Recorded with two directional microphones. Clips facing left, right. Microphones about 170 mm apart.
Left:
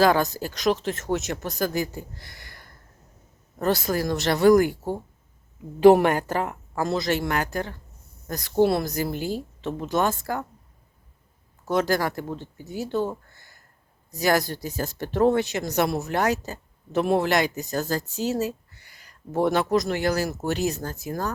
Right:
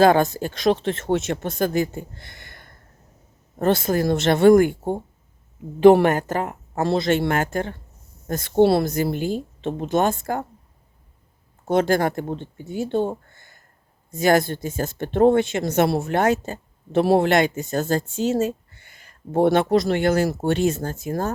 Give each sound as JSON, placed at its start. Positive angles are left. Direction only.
{"t": 0.0, "sound": "a woman's voice", "side_deg": -25}
{"t": 6.0, "sound": "speech", "side_deg": -45}
{"t": 6.7, "sound": "a woman's voice", "side_deg": -25}
{"t": 11.6, "sound": "a woman's voice", "side_deg": -25}
{"t": 21.1, "sound": "speech", "side_deg": -45}